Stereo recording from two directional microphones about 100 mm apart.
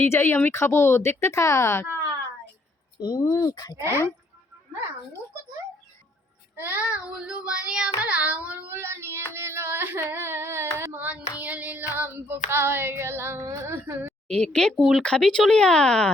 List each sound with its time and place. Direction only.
0.0 s speech: 20° left (ahead or behind)
3.0 s speech: 40° left (ahead or behind)
3.8 s child singing: 25° right (ahead or behind)
6.6 s child singing: 20° right (ahead or behind)
11.3 s child singing: 15° right (ahead or behind)
14.3 s speech: 5° left (ahead or behind)
14.8 s speech: 5° right (ahead or behind)
15.0 s speech: 10° left (ahead or behind)